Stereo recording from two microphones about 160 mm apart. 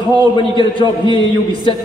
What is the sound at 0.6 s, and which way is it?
A man's voice, 30° left (ahead or behind).